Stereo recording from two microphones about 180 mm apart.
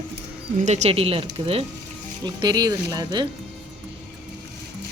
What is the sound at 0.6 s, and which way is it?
Speech, 40° right (ahead or behind).